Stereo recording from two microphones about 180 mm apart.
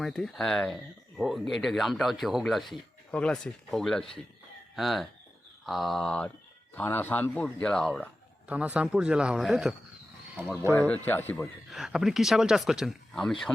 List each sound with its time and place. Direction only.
0.0 s speech: centre (ahead or behind)
8.4 s speech: 10° right (ahead or behind)
10.6 s speech: 15° right (ahead or behind)
10.8 s speech: 10° left (ahead or behind)
11.3 s speech: centre (ahead or behind)